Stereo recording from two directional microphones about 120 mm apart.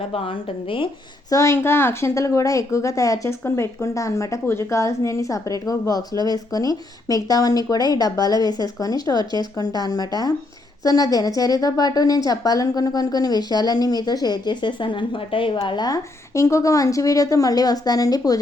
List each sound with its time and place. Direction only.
0.1 s a woman's voice: 50° left (ahead or behind)
1.3 s a woman's voice: 25° left (ahead or behind)